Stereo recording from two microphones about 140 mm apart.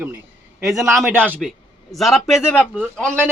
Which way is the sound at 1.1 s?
15° right (ahead or behind).